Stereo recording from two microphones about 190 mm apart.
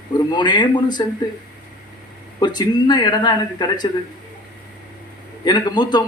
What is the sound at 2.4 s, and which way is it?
Speech, 20° left (ahead or behind).